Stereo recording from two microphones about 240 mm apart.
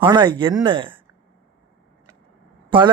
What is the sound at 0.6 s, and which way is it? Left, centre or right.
Speech, right.